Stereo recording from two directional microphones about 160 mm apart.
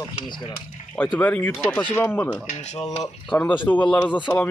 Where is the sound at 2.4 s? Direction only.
45° left (ahead or behind).